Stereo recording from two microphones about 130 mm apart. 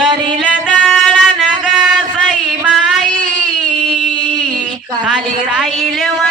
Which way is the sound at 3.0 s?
80° right.